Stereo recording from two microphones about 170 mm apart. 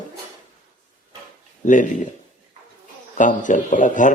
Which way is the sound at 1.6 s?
50° left (ahead or behind).